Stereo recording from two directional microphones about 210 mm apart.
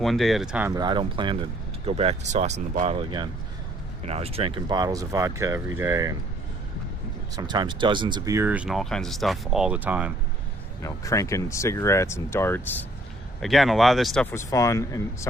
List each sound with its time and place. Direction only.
0.0 s speech: centre (ahead or behind)
0.7 s speech: 20° right (ahead or behind)
7.3 s speech: 20° right (ahead or behind)
10.8 s speech: 15° left (ahead or behind)